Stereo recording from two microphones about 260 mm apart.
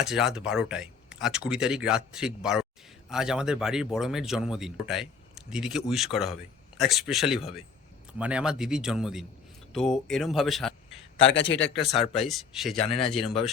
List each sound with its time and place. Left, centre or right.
0.0 s speech: centre
11.2 s a man's voice: left
11.7 s speech: left
12.1 s speech: centre
12.9 s speech: left
13.1 s speech: centre